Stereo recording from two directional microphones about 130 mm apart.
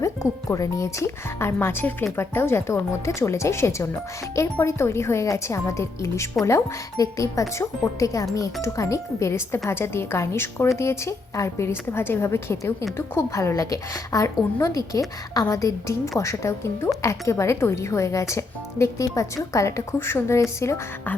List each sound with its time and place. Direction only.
0.0 s a woman's voice: 25° left (ahead or behind)